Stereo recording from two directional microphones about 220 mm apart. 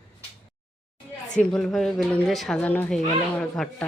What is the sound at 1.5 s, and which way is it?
Speech, centre (ahead or behind).